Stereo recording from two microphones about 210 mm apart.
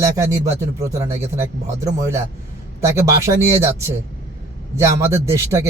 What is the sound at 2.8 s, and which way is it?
Speech, 15° right (ahead or behind).